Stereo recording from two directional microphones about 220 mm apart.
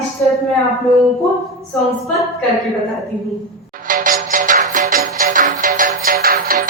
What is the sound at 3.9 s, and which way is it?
Music, 40° right (ahead or behind).